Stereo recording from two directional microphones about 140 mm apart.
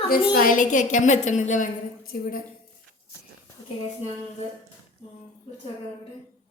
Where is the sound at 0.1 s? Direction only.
90° left.